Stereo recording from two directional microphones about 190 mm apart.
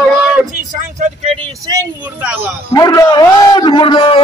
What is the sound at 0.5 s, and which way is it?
Vehicle, 40° right (ahead or behind).